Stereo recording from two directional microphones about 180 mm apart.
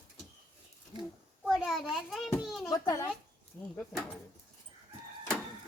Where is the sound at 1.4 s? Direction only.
Centre (ahead or behind).